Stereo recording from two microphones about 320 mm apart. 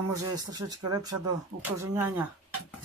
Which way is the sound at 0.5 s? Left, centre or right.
Centre.